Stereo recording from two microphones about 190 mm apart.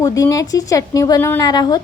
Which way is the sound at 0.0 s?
20° left (ahead or behind).